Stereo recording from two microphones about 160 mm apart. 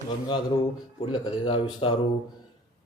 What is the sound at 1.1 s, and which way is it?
Speech, 35° left (ahead or behind).